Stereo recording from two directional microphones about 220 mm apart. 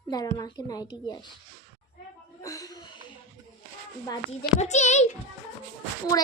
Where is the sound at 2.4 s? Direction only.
15° left (ahead or behind).